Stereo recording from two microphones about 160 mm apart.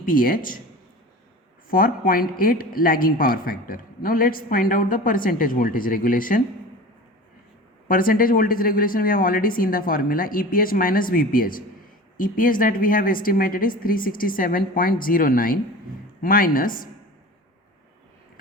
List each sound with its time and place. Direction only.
0.0 s a woman's voice: 60° left (ahead or behind)
1.7 s a woman's voice: 65° left (ahead or behind)
7.9 s a woman's voice: 60° left (ahead or behind)